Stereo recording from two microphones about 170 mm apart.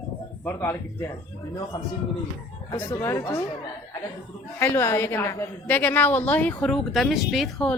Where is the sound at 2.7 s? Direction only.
15° left (ahead or behind).